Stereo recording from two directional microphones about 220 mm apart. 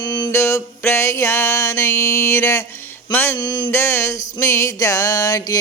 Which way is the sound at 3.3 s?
20° left (ahead or behind).